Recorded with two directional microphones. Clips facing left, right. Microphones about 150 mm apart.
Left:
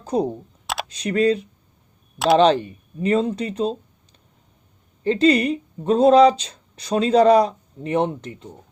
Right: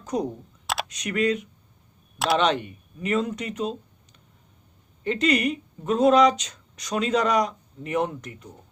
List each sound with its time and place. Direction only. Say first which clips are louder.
0.0 s speech: left 5 dB; 30° left (ahead or behind)
2.1 s speech: left 7 dB; centre (ahead or behind)
2.4 s speech: left 7 dB; 30° left (ahead or behind)